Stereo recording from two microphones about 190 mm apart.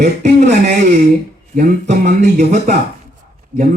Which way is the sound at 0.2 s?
40° right (ahead or behind).